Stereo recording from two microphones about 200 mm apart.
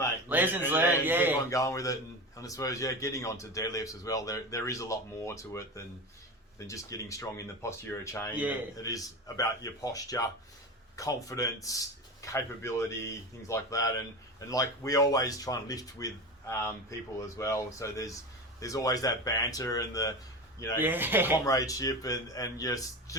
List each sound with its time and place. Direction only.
0.3 s a man's voice: 10° right (ahead or behind)
1.5 s a man's voice: 15° left (ahead or behind)
20.7 s speech: 10° right (ahead or behind)
21.3 s a man's voice: 15° left (ahead or behind)